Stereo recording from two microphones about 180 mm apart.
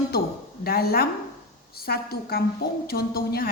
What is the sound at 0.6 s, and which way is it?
A woman's voice, 60° left (ahead or behind).